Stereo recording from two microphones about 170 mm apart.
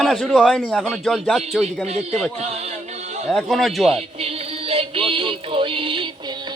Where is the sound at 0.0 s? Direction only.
Centre (ahead or behind).